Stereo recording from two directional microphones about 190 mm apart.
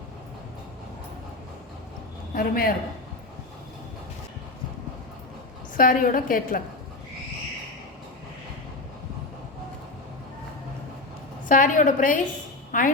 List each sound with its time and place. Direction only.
2.3 s a woman's voice: 50° left (ahead or behind)
5.7 s a woman's voice: 45° left (ahead or behind)
11.4 s a woman's voice: 45° left (ahead or behind)